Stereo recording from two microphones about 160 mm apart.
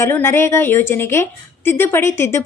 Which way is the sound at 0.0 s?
15° left (ahead or behind).